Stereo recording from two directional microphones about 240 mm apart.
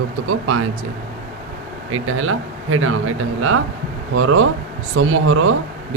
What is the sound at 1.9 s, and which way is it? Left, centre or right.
Speech, right.